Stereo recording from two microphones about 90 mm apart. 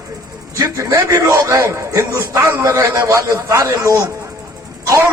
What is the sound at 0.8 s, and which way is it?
A man's voice, 35° right (ahead or behind).